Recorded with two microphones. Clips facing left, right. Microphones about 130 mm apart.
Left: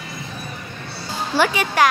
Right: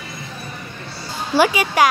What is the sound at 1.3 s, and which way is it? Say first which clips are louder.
Speech: right 3 dB; 10° right (ahead or behind).